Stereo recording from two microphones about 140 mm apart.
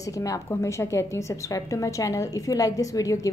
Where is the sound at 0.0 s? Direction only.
25° left (ahead or behind).